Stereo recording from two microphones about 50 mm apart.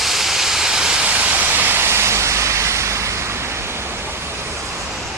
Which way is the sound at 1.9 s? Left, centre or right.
Right.